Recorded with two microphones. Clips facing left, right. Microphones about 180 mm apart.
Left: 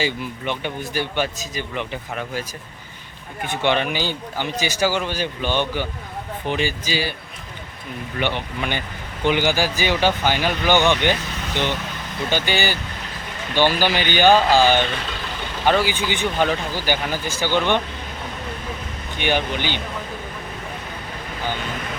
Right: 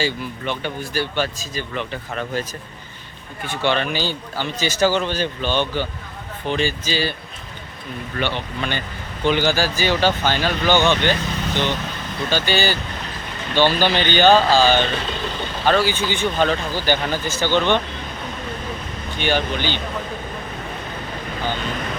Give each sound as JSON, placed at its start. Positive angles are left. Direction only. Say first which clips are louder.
{"t": 0.0, "sound": "speech", "louder": "right 1 dB", "side_deg": 15}
{"t": 8.2, "sound": "speech", "louder": "even", "side_deg": 15}
{"t": 19.2, "sound": "speech", "louder": "right 1 dB", "side_deg": 15}